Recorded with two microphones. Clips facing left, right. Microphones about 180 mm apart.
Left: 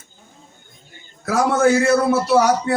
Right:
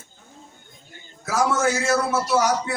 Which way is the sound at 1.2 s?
60° left (ahead or behind).